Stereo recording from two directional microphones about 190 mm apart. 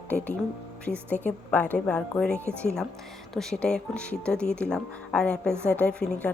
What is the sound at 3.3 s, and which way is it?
A woman's voice, 5° left (ahead or behind).